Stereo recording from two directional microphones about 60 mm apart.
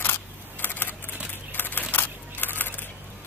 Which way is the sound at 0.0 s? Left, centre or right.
Left.